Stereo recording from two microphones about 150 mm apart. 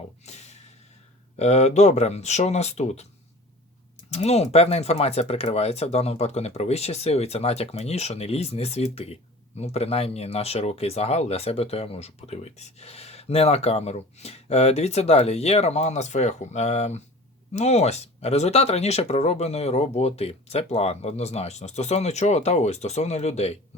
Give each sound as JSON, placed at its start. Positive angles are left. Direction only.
{"t": 0.3, "sound": "snort", "side_deg": 45}
{"t": 1.4, "sound": "speech", "side_deg": 50}
{"t": 4.1, "sound": "speech", "side_deg": 45}